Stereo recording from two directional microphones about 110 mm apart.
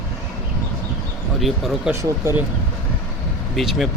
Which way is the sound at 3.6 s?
Centre (ahead or behind).